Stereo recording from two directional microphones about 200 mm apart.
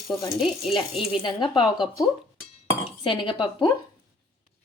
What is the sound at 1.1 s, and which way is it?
A woman's voice, 25° left (ahead or behind).